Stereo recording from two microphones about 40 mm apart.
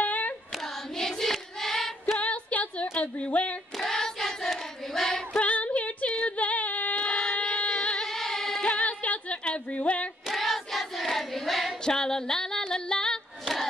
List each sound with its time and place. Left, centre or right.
0.0 s female singing: left
0.9 s hands: centre
2.1 s music: left
3.0 s speech: left
3.7 s hands: centre
5.3 s female singing: left
7.1 s a sound: centre
8.1 s singing: centre
8.6 s a sound: left
9.4 s yodeling: left
10.3 s child singing: centre
11.8 s music: centre